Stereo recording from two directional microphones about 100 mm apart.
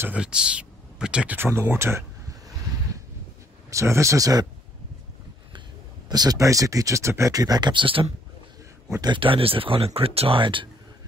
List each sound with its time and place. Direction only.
0.2 s speech: 10° right (ahead or behind); by 2.0 s 25° right (ahead or behind)
3.7 s speech: 30° right (ahead or behind)
6.0 s speech: 40° right (ahead or behind); by 10.7 s 55° right (ahead or behind)